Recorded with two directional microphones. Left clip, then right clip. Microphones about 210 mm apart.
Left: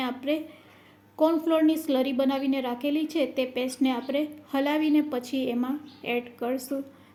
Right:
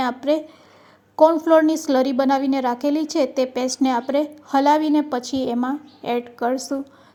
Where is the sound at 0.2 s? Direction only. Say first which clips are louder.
Right 8 dB; 10° right (ahead or behind).